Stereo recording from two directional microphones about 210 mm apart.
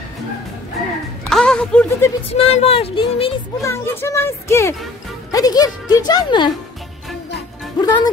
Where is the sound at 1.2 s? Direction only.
5° left (ahead or behind).